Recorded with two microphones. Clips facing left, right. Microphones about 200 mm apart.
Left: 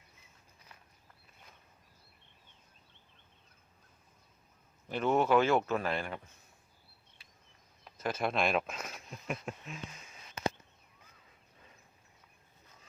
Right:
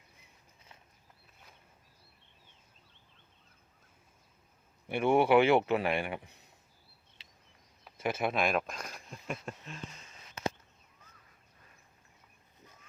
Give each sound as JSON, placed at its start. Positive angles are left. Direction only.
{"t": 4.9, "sound": "speech", "side_deg": -10}
{"t": 7.9, "sound": "speech", "side_deg": -5}